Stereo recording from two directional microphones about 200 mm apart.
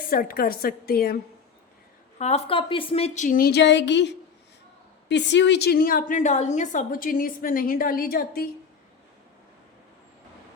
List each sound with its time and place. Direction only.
0.1 s a woman's voice: 45° left (ahead or behind)
2.1 s a woman's voice: 35° left (ahead or behind)